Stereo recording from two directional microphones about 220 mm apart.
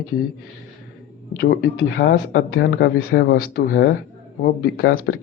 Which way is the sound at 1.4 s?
50° left (ahead or behind).